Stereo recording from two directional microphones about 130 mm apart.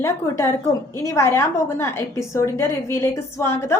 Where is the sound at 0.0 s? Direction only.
20° left (ahead or behind).